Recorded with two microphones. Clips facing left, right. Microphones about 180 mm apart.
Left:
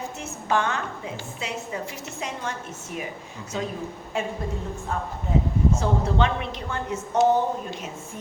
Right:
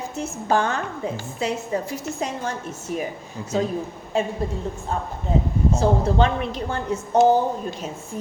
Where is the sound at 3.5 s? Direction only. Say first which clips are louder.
Right 6 dB; 35° right (ahead or behind).